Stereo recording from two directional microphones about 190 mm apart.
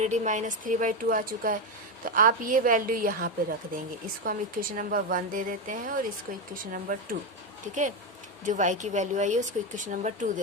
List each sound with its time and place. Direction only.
0.0 s speech: 40° right (ahead or behind)
8.4 s speech: 40° right (ahead or behind)